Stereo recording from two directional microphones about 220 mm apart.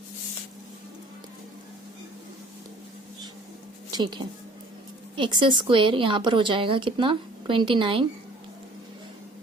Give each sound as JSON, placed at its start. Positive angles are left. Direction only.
{"t": 3.9, "sound": "a woman's voice", "side_deg": -20}